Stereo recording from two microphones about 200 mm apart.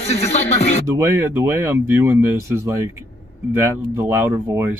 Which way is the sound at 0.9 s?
10° right (ahead or behind).